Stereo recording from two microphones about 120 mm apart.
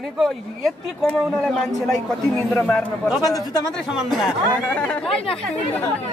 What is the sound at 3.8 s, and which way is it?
Speech, centre (ahead or behind).